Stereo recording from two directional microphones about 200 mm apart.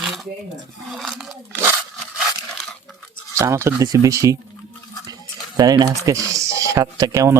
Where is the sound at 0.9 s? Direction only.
Centre (ahead or behind).